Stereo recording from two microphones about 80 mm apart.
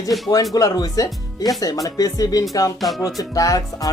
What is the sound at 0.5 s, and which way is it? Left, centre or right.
Speech, left.